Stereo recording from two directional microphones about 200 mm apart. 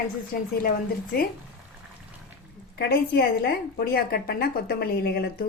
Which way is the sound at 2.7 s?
50° left (ahead or behind).